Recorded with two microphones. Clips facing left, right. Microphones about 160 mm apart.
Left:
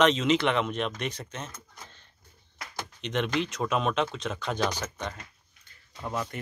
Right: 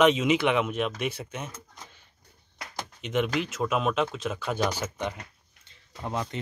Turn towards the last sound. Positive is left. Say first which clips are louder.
# right 1 dB
turn(degrees=-20)  # may be behind; listen again after turning